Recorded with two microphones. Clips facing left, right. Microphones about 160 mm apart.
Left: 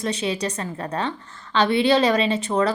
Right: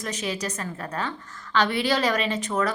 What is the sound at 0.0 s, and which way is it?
A woman's voice, 30° left (ahead or behind).